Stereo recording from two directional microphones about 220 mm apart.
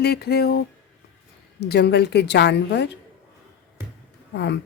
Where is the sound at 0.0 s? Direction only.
45° left (ahead or behind).